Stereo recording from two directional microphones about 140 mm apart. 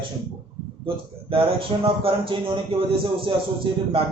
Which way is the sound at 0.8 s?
40° right (ahead or behind).